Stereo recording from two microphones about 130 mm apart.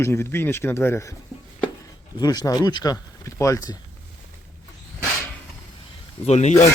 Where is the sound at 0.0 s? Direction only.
20° left (ahead or behind).